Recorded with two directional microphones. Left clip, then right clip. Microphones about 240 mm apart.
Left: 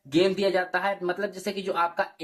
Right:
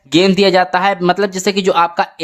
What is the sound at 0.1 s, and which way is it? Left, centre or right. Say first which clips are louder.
Speech: right 12 dB; right.